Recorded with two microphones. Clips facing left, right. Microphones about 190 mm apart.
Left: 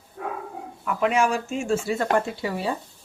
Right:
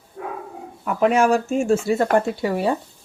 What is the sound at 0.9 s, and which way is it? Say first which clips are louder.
Speech: right 5 dB; 45° right (ahead or behind).